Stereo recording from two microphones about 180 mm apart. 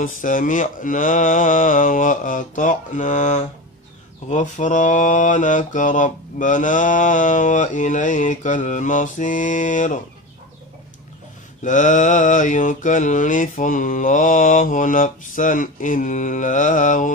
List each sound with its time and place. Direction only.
0.0 s mantra: 45° left (ahead or behind)
11.6 s mantra: 45° left (ahead or behind)